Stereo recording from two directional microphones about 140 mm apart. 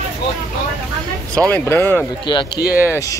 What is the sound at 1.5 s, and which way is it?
Speech, 15° left (ahead or behind).